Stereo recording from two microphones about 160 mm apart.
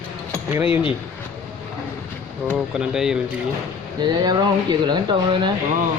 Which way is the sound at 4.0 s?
25° right (ahead or behind).